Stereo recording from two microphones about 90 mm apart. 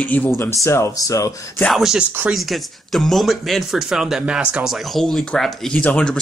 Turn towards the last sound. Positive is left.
turn(degrees=10)  # may be behind; listen again after turning